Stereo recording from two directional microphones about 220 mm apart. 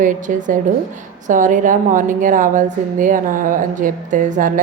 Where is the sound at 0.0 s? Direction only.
35° right (ahead or behind).